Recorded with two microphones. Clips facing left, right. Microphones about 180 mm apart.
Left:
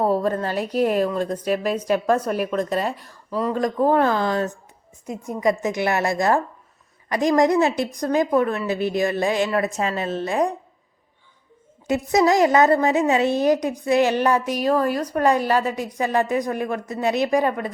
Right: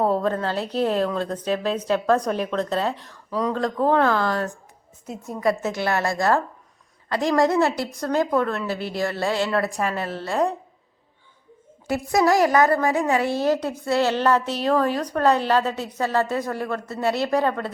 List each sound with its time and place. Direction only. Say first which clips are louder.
0.0 s a woman's voice: left 1 dB; 10° left (ahead or behind)
11.9 s a woman's voice: left 2 dB; 20° left (ahead or behind)